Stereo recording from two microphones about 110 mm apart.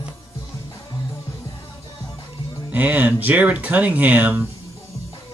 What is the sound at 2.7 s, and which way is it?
Speech, 15° right (ahead or behind).